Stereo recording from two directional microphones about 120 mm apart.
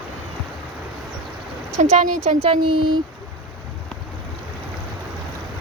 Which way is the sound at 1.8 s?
70° right (ahead or behind).